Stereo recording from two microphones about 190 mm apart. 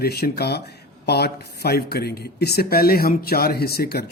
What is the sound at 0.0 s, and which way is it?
Speech, 55° left (ahead or behind).